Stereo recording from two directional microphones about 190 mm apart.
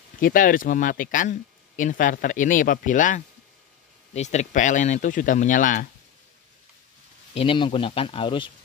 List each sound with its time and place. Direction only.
0.2 s speech: 45° left (ahead or behind)
7.3 s speech: 25° left (ahead or behind)